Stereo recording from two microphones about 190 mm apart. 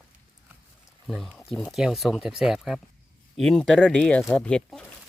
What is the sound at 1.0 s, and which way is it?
Speech, centre (ahead or behind).